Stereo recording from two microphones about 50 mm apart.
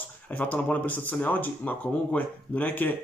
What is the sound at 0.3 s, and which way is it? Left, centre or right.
Speech, left.